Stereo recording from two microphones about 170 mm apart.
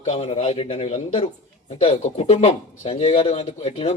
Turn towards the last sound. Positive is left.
turn(degrees=35)  # may be behind; listen again after turning